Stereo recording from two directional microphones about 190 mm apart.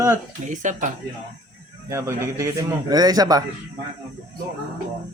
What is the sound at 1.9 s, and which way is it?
A man's voice, 15° right (ahead or behind).